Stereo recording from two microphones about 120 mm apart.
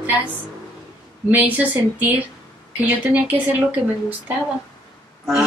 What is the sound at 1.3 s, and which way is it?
Speech, 15° right (ahead or behind).